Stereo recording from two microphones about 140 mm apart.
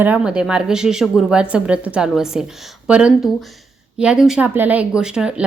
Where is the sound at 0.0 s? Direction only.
10° right (ahead or behind).